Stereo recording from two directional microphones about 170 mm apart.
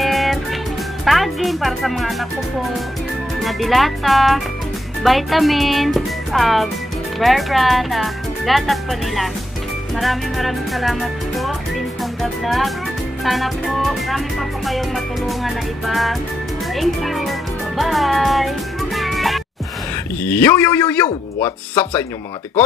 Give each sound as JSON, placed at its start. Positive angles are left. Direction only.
{"t": 0.0, "sound": "music", "side_deg": 0}
{"t": 1.0, "sound": "speech", "side_deg": 0}
{"t": 18.9, "sound": "music", "side_deg": 0}
{"t": 20.2, "sound": "a man's voice", "side_deg": 10}